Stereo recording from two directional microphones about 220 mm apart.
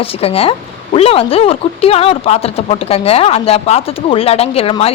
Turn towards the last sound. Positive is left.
turn(degrees=25)  # may be behind; listen again after turning